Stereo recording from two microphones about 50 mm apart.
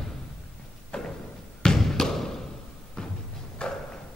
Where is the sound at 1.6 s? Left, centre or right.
Centre.